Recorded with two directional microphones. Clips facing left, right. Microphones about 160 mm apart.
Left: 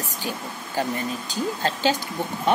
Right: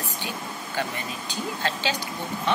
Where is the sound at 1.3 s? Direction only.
40° left (ahead or behind).